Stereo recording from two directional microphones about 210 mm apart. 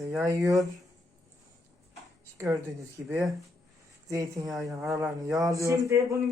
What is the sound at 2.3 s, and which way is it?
Speech, 15° right (ahead or behind).